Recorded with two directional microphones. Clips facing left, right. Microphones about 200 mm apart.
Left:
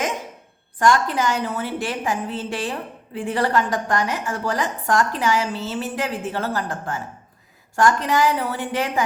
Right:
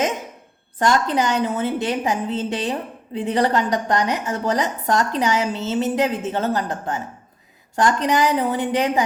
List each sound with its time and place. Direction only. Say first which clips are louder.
0.8 s a woman's voice: even; 20° right (ahead or behind)